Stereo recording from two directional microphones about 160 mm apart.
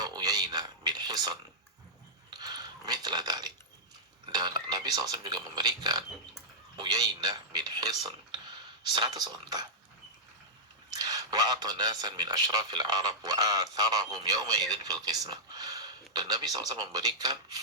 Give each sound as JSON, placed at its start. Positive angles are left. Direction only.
{"t": 0.0, "sound": "a sound", "side_deg": -25}
{"t": 4.3, "sound": "speech", "side_deg": -25}
{"t": 10.9, "sound": "speech", "side_deg": -25}